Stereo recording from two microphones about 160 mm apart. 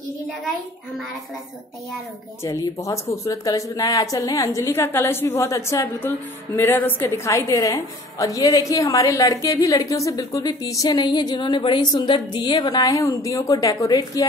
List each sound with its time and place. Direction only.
2.4 s a woman's voice: 20° left (ahead or behind)